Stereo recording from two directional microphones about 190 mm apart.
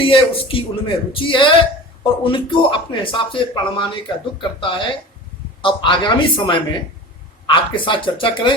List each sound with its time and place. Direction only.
0.0 s speech: 30° left (ahead or behind)